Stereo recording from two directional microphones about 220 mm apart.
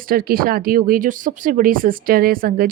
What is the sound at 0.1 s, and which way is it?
Speech, 40° right (ahead or behind).